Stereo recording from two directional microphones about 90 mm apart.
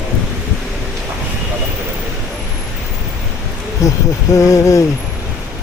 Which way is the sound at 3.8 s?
40° left (ahead or behind).